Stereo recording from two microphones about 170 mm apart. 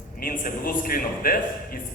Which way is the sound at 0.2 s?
55° left (ahead or behind).